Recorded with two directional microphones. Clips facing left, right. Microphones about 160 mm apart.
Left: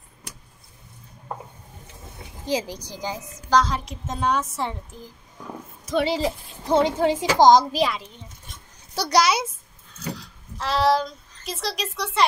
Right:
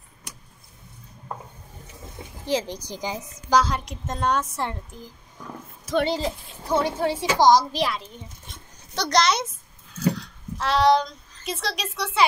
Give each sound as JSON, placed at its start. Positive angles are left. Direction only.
{"t": 2.4, "sound": "speech", "side_deg": 15}
{"t": 2.9, "sound": "a woman's voice", "side_deg": -15}
{"t": 3.6, "sound": "a woman's voice", "side_deg": 0}
{"t": 5.4, "sound": "a sound", "side_deg": 5}
{"t": 6.7, "sound": "a woman's voice", "side_deg": 20}
{"t": 7.7, "sound": "a woman's voice", "side_deg": 0}
{"t": 9.9, "sound": "a sound", "side_deg": 0}